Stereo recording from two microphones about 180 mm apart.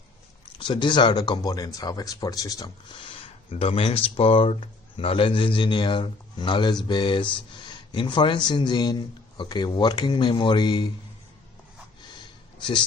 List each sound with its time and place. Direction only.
0.6 s speech: 25° left (ahead or behind)
3.5 s speech: 30° left (ahead or behind)
12.5 s a sound: 25° left (ahead or behind)